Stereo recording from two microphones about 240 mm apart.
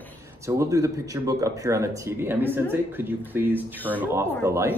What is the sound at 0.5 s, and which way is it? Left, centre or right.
Speech, centre.